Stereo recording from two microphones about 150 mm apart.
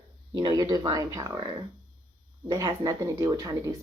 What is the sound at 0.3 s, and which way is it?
Speech, 25° right (ahead or behind).